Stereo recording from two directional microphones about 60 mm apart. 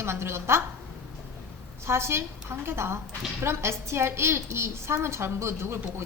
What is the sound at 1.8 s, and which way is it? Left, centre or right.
A woman's voice, right.